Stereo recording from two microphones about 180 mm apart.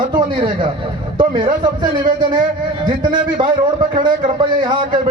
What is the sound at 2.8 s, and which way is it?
A man's voice, 25° right (ahead or behind).